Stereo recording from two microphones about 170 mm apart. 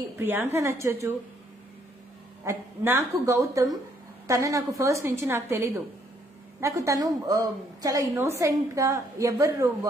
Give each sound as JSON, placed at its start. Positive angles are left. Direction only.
{"t": 0.2, "sound": "a woman's voice", "side_deg": -10}
{"t": 2.4, "sound": "a woman's voice", "side_deg": -15}